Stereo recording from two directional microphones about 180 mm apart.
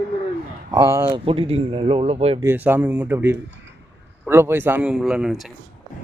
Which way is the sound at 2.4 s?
10° right (ahead or behind).